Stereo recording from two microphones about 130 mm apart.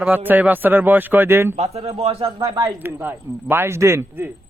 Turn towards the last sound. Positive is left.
turn(degrees=-20)  # may be behind; listen again after turning